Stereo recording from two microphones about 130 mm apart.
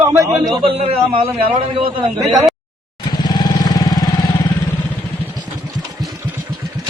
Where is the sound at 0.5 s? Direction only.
45° right (ahead or behind).